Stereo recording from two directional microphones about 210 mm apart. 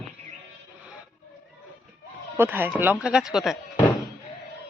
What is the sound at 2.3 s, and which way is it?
Speech, 10° right (ahead or behind).